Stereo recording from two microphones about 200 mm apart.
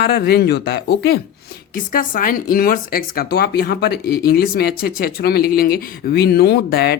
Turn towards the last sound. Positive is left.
turn(degrees=55)  # may be behind; listen again after turning